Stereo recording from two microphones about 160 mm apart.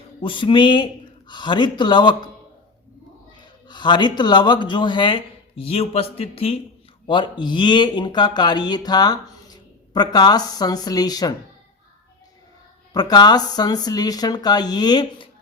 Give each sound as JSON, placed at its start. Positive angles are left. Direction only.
{"t": 0.2, "sound": "speech", "side_deg": 30}
{"t": 3.7, "sound": "speech", "side_deg": 30}
{"t": 12.9, "sound": "speech", "side_deg": 25}